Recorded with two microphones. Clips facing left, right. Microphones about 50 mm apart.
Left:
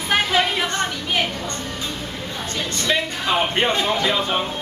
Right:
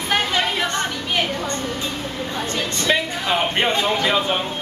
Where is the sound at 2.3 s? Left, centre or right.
Right.